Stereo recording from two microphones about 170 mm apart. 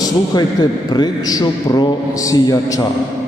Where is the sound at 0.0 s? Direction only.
25° left (ahead or behind).